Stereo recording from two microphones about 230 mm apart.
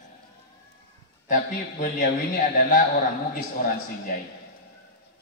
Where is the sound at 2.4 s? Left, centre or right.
Left.